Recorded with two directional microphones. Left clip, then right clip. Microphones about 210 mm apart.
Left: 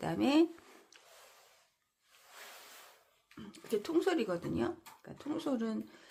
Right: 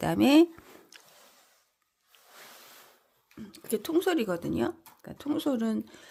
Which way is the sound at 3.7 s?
40° right (ahead or behind).